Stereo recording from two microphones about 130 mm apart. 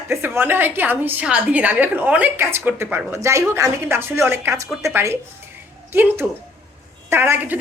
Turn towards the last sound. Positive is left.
turn(degrees=-15)  # may be behind; listen again after turning